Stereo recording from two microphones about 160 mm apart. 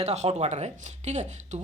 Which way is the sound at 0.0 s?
45° right (ahead or behind).